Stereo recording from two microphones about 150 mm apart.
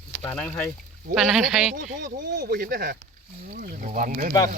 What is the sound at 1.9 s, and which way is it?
Speech, 65° right (ahead or behind).